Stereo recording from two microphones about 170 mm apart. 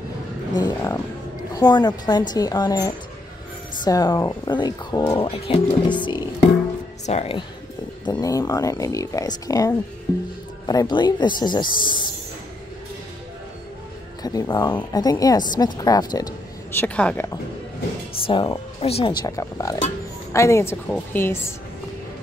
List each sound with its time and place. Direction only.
0.6 s music: 25° left (ahead or behind)
1.5 s speech: 25° left (ahead or behind)
5.1 s speech: 30° left (ahead or behind)
7.1 s speech: 40° left (ahead or behind)
8.0 s speech: 20° left (ahead or behind)
10.1 s music: 20° left (ahead or behind)
10.7 s speech: 25° left (ahead or behind)
14.2 s speech: 20° left (ahead or behind)
16.8 s speech: 10° left (ahead or behind)
18.2 s speech: 30° left (ahead or behind)
19.2 s speech: 20° left (ahead or behind)